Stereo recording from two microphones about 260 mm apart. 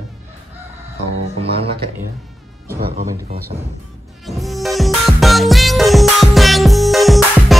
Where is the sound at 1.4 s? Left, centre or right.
Right.